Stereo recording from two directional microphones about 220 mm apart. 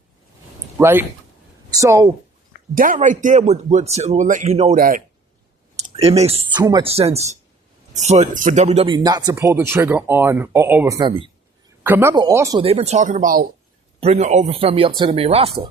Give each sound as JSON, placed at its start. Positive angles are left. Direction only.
{"t": 0.8, "sound": "speech", "side_deg": -10}
{"t": 2.7, "sound": "speech", "side_deg": -40}
{"t": 12.6, "sound": "speech", "side_deg": -30}